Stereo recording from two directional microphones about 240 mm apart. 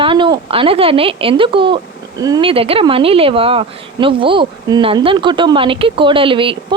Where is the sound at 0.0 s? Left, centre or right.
Right.